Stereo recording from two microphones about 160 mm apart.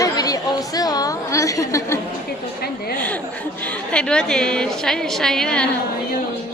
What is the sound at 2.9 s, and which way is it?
A woman's voice, 10° left (ahead or behind).